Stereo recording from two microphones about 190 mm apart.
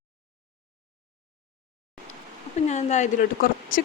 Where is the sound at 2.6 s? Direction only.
35° left (ahead or behind).